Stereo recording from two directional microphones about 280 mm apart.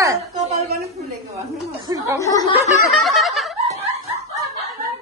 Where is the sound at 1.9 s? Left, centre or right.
Centre.